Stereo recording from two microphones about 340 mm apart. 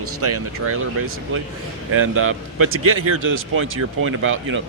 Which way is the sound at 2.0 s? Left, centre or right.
Right.